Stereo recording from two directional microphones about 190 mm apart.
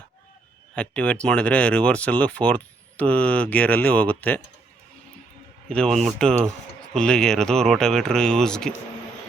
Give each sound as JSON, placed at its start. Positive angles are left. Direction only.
{"t": 0.8, "sound": "speech", "side_deg": 5}
{"t": 5.6, "sound": "speech", "side_deg": 5}